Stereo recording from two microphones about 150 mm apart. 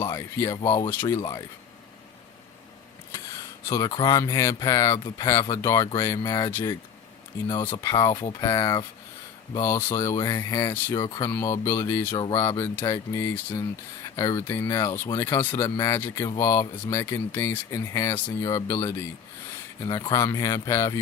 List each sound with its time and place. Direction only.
0.0 s speech: 25° left (ahead or behind)
3.1 s speech: 20° left (ahead or behind)
7.4 s speech: 30° left (ahead or behind)
11.3 s speech: 15° left (ahead or behind)